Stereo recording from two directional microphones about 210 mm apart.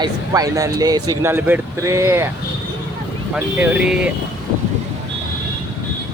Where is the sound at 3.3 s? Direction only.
5° right (ahead or behind).